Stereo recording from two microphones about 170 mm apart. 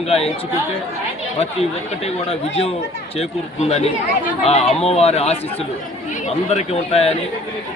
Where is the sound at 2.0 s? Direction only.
35° left (ahead or behind).